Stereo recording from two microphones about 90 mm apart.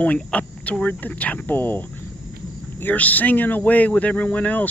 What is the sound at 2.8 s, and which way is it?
Speech, 20° left (ahead or behind).